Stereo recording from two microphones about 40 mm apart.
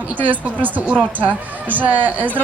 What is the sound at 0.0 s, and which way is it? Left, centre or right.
A woman's voice, right.